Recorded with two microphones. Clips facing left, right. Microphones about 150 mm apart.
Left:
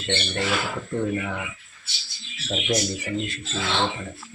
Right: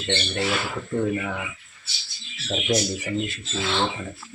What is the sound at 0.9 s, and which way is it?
Speech, 5° right (ahead or behind).